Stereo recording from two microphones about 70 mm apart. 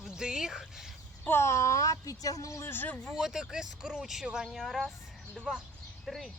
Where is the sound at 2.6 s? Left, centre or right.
Left.